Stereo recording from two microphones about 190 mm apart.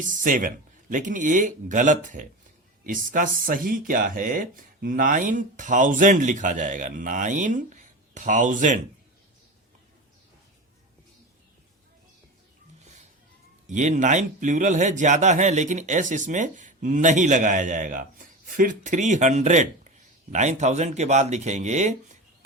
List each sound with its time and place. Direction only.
0.0 s speech: 45° right (ahead or behind)
13.7 s a man's voice: 40° right (ahead or behind)